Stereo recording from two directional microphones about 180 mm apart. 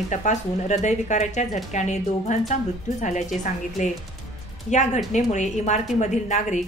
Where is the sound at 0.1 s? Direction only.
40° left (ahead or behind).